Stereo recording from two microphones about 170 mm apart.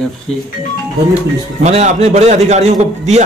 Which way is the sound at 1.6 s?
40° right (ahead or behind).